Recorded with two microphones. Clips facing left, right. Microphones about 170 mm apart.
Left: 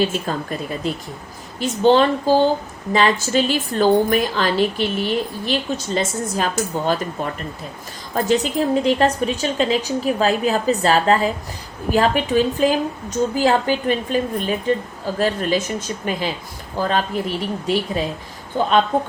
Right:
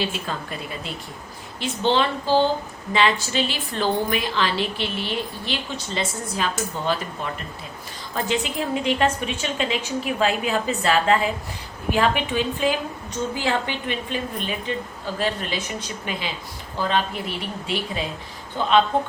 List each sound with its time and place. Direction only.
0.0 s a woman's voice: 45° left (ahead or behind)